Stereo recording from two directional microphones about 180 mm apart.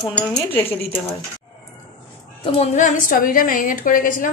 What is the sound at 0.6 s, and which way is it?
Speech, 15° left (ahead or behind).